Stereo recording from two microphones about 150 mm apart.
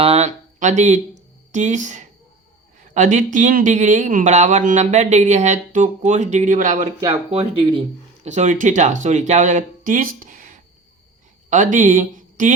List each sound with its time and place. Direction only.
0.0 s speech: 45° right (ahead or behind); by 6.8 s 60° right (ahead or behind)
7.0 s speech: 40° right (ahead or behind); by 12.5 s 60° right (ahead or behind)